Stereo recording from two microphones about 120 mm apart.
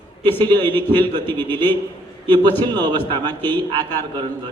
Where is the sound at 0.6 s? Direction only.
15° left (ahead or behind).